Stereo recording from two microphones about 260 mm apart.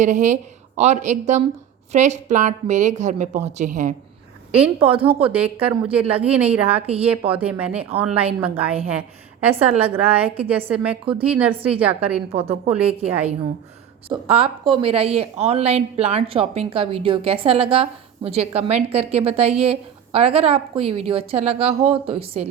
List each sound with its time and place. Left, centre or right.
0.0 s a woman's voice: right
4.9 s a woman's voice: right
5.3 s a woman's voice: centre
6.8 s a woman's voice: right
7.1 s a woman's voice: centre
10.2 s a woman's voice: right
10.5 s a woman's voice: centre
12.3 s a woman's voice: right